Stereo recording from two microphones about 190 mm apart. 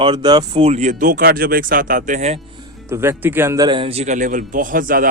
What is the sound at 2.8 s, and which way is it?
Speech, 15° right (ahead or behind).